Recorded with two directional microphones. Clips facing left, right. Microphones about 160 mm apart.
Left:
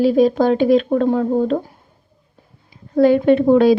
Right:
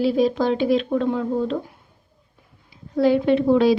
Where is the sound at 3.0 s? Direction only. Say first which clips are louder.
Left 5 dB; 50° left (ahead or behind).